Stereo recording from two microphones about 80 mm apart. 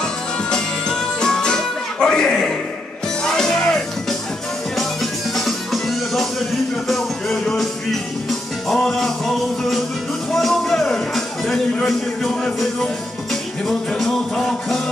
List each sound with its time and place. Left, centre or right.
0.0 s music: centre
5.3 s music: centre